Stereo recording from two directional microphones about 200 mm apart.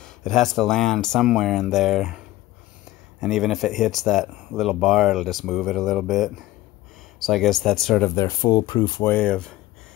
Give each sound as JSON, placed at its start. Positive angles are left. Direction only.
{"t": 0.0, "sound": "speech", "side_deg": 0}
{"t": 8.1, "sound": "speech", "side_deg": 20}
{"t": 9.0, "sound": "speech", "side_deg": 10}